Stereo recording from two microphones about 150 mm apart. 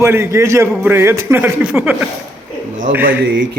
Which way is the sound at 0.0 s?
20° right (ahead or behind).